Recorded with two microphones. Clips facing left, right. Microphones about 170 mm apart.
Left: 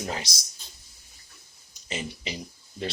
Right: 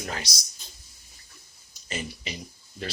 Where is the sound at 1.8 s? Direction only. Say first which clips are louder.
Left 1 dB; 20° left (ahead or behind).